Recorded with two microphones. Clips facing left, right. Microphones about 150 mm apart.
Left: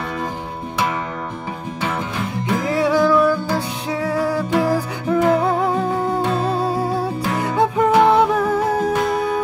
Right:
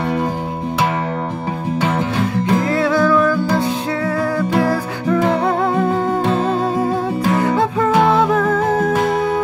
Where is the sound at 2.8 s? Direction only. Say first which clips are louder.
Left 2 dB; 15° left (ahead or behind).